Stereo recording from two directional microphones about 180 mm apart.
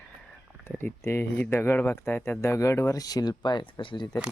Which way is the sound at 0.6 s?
10° left (ahead or behind).